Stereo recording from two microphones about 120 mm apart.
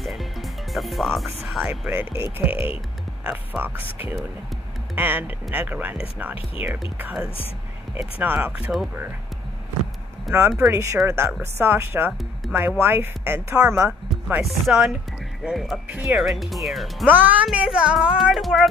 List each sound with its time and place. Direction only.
0.0 s music: centre (ahead or behind)
2.3 s speech: 15° right (ahead or behind)
10.3 s music: centre (ahead or behind)
10.7 s speech: 25° right (ahead or behind)
12.1 s music: centre (ahead or behind)
12.5 s speech: 15° right (ahead or behind)
13.8 s speech: 5° right (ahead or behind)
15.4 s music: centre (ahead or behind)
17.1 s speech: 15° right (ahead or behind)
17.5 s music: 5° right (ahead or behind)